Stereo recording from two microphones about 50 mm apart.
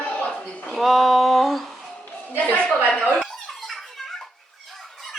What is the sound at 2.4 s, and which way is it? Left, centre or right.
Speech, left.